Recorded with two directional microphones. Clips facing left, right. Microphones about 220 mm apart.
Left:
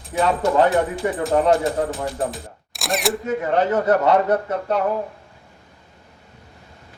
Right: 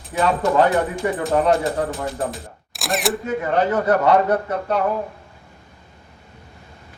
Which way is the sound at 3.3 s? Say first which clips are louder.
Left 1 dB; 20° left (ahead or behind).